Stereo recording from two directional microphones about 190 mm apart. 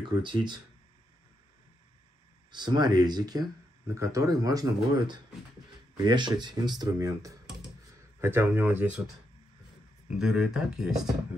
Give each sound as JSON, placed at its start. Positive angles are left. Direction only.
{"t": 0.2, "sound": "speech", "side_deg": -25}
{"t": 2.5, "sound": "speech", "side_deg": -20}